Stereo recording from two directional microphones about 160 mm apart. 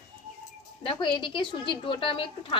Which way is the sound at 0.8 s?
30° left (ahead or behind).